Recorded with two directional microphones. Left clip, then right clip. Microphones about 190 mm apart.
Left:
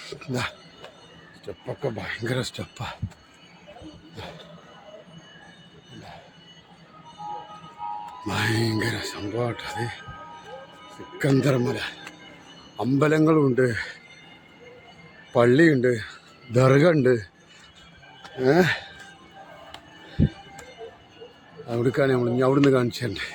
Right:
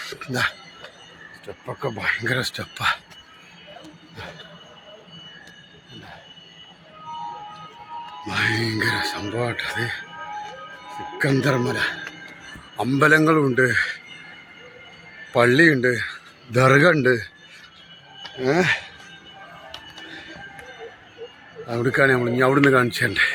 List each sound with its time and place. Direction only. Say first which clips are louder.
0.0 s a sound: right 6 dB; 10° left (ahead or behind)
1.6 s speech: right 6 dB; 5° left (ahead or behind)
4.2 s speech: right 3 dB; 5° left (ahead or behind)
8.2 s speech: right 4 dB; 35° left (ahead or behind); by 10.0 s 15° left (ahead or behind)
11.2 s speech: right 2 dB; 15° left (ahead or behind)
15.3 s a man's voice: right 2 dB; 20° left (ahead or behind)
18.3 s speech: even; 35° left (ahead or behind)
21.7 s a man's voice: right 4 dB; 5° left (ahead or behind)